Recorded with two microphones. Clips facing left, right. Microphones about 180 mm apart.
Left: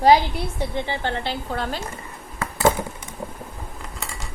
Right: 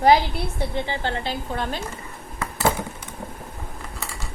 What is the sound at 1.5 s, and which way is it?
Speech, 20° right (ahead or behind).